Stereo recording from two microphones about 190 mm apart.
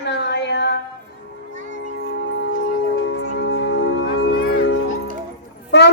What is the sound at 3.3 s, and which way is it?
Music, 60° left (ahead or behind).